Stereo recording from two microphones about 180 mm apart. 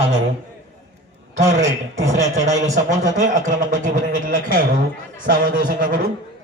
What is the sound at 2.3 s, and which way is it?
A man's voice, 40° right (ahead or behind).